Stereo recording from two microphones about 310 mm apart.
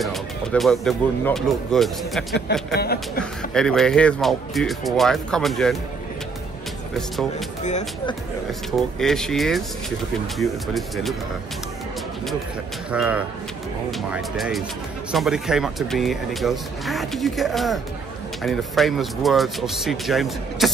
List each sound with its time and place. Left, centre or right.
0.0 s speech: centre
2.7 s speech: left
3.5 s speech: centre
7.0 s speech: centre
7.6 s speech: left
8.5 s speech: centre
12.9 s speech: centre